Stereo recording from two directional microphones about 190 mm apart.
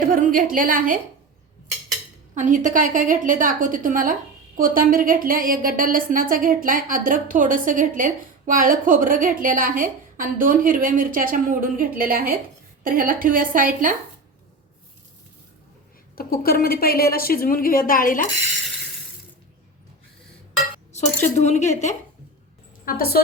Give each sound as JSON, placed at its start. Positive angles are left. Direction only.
{"t": 0.1, "sound": "a woman's voice", "side_deg": -45}
{"t": 2.3, "sound": "a woman's voice", "side_deg": -40}
{"t": 16.1, "sound": "a woman's voice", "side_deg": 50}
{"t": 21.0, "sound": "speech", "side_deg": 35}
{"t": 22.9, "sound": "a woman's voice", "side_deg": 55}